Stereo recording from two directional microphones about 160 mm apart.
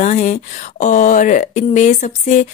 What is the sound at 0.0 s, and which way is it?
Speech, 45° left (ahead or behind).